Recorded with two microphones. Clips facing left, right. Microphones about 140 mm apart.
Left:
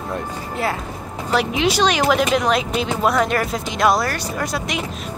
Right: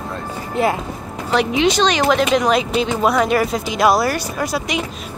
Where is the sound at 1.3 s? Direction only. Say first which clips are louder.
Right 3 dB; centre (ahead or behind).